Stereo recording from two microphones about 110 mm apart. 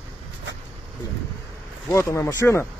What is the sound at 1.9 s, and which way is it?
Speech, 25° left (ahead or behind).